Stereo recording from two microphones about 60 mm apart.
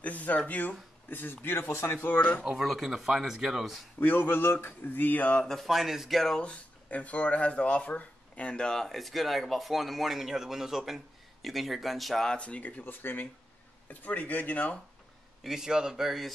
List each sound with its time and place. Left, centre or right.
0.0 s speech: left
2.6 s speech: centre
4.0 s speech: left
5.4 s speech: centre
6.3 s speech: centre
12.3 s speech: centre
15.4 s speech: centre